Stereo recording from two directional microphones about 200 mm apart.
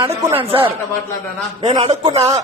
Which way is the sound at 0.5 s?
25° right (ahead or behind).